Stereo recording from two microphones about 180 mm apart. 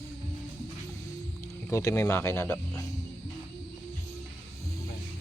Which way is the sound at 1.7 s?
15° left (ahead or behind).